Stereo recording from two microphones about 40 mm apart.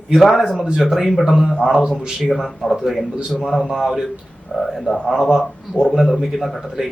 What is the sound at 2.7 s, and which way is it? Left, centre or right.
A man's voice, centre.